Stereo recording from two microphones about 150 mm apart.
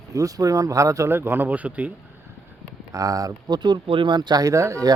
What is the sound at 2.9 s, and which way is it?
Speech, 25° right (ahead or behind).